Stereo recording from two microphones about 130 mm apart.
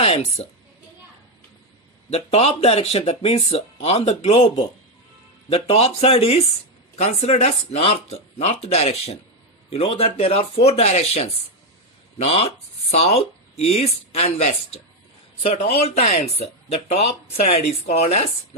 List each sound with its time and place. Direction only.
0.0 s a woman's voice: 50° left (ahead or behind)
2.0 s speech: 55° left (ahead or behind)